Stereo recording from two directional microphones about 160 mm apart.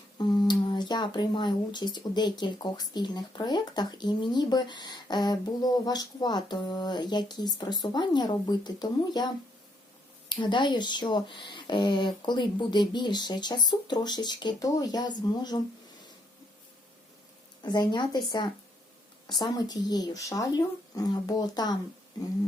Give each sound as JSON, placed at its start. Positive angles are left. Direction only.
{"t": 0.2, "sound": "speech", "side_deg": 25}
{"t": 17.6, "sound": "speech", "side_deg": 25}